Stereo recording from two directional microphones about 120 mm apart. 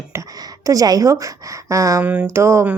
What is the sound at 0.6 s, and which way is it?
A woman's voice, 30° right (ahead or behind).